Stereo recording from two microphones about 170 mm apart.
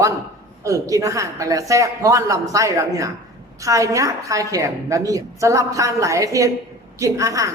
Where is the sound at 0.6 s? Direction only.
20° right (ahead or behind).